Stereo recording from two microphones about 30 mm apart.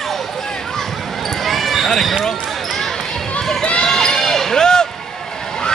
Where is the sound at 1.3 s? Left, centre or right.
Centre.